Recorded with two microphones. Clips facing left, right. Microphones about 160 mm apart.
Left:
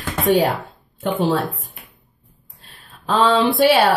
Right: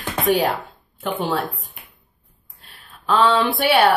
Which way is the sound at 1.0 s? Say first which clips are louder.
Left 4 dB; 30° left (ahead or behind).